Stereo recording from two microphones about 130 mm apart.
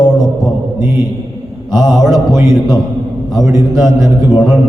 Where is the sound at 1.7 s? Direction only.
Centre (ahead or behind).